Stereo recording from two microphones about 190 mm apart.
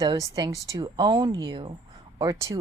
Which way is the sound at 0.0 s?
20° right (ahead or behind).